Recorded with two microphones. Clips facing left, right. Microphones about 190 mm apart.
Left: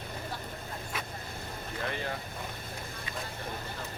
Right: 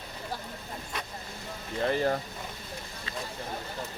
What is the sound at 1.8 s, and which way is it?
Speech, 35° right (ahead or behind).